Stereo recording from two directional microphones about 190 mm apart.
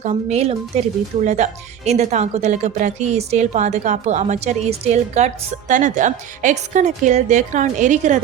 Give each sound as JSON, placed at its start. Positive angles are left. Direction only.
{"t": 0.0, "sound": "speech", "side_deg": -35}